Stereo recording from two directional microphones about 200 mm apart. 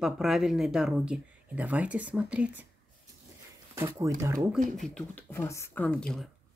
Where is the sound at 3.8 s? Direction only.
15° right (ahead or behind).